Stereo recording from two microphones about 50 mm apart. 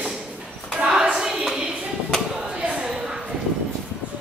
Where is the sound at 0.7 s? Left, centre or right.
Centre.